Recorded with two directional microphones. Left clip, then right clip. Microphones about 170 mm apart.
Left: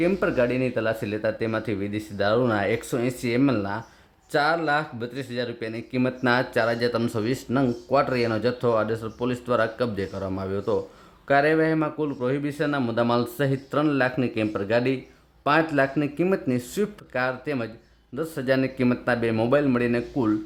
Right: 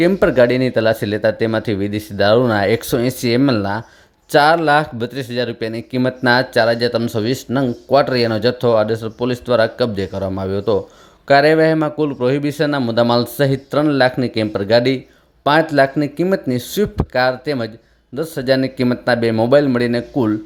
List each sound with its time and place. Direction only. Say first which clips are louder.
0.0 s speech: right 10 dB; 40° right (ahead or behind)